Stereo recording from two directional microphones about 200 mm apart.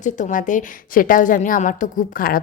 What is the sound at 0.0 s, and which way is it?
A woman's voice, 40° left (ahead or behind).